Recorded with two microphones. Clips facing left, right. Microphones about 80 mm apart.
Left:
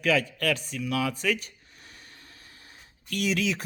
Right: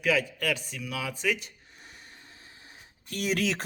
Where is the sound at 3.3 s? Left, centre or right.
Right.